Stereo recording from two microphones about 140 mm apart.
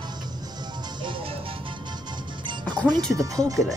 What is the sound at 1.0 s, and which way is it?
Music, 35° right (ahead or behind).